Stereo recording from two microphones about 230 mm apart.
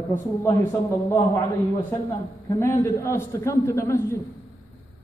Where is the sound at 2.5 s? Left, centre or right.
Centre.